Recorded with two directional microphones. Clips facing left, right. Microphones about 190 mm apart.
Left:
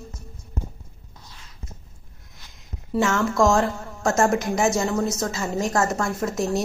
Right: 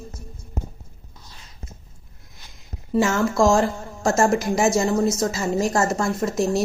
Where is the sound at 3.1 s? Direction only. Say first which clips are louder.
Right 1 dB; 30° right (ahead or behind).